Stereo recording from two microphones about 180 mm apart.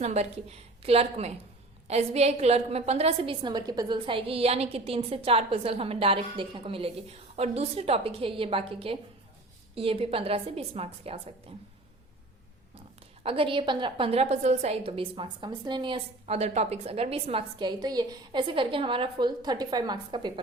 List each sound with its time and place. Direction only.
0.0 s a woman's voice: 40° right (ahead or behind)
3.4 s a woman's voice: 20° right (ahead or behind)
13.2 s a woman's voice: 30° right (ahead or behind)